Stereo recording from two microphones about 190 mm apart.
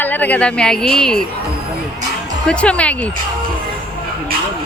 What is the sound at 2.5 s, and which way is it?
Speech, 5° left (ahead or behind).